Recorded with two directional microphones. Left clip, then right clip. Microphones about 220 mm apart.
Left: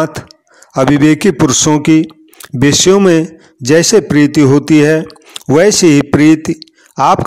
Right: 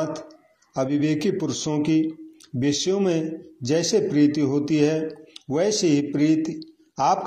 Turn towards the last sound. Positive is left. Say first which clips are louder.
# left 11 dB
turn(degrees=40)  # may be behind; listen again after turning